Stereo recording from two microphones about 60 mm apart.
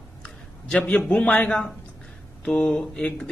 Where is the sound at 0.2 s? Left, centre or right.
Centre.